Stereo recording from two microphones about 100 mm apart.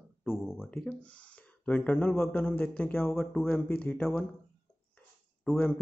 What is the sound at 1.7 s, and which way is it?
Speech, 15° left (ahead or behind).